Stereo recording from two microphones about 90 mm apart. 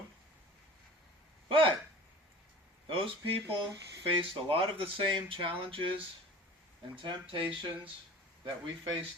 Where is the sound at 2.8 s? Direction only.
75° right (ahead or behind).